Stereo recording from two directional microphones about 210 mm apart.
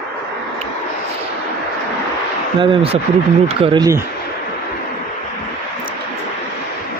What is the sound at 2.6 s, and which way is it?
Speech, 25° right (ahead or behind).